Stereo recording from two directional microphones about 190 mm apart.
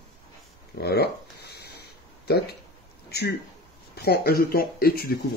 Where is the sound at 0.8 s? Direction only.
55° left (ahead or behind).